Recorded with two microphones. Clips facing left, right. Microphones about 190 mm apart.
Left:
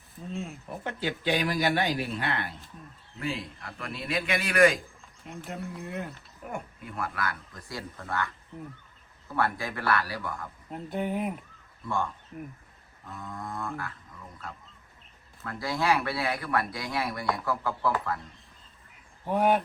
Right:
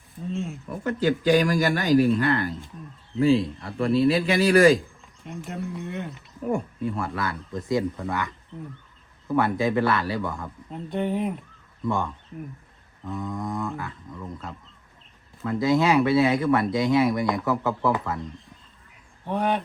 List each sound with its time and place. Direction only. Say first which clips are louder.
0.3 s speech: right 6 dB; centre (ahead or behind)
0.9 s speech: right 9 dB; 40° right (ahead or behind)
3.2 s a man's voice: right 14 dB; 30° right (ahead or behind)
5.5 s speech: right 4 dB; centre (ahead or behind)
6.5 s speech: right 12 dB; 30° right (ahead or behind)
8.5 s speech: right 3 dB; 5° left (ahead or behind)
9.3 s speech: right 8 dB; 20° right (ahead or behind)
10.7 s speech: right 4 dB; 5° left (ahead or behind)
13.4 s a sound: right 6 dB; 20° right (ahead or behind)
15.4 s speech: right 7 dB; 20° right (ahead or behind)
19.2 s speech: left 1 dB; 5° left (ahead or behind)